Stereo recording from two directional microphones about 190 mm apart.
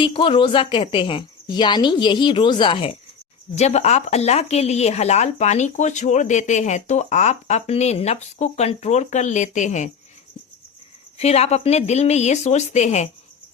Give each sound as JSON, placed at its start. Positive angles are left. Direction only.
{"t": 0.0, "sound": "a woman's voice", "side_deg": 25}
{"t": 11.2, "sound": "speech", "side_deg": 35}